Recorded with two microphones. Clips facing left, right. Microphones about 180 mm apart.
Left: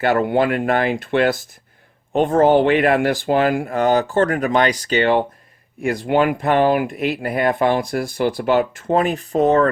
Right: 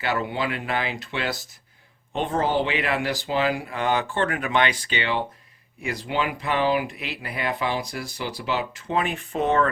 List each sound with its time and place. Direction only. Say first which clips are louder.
0.0 s speech: left 9 dB; 50° left (ahead or behind)